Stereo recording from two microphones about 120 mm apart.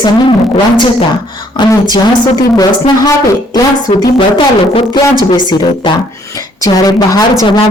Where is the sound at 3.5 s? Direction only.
40° left (ahead or behind).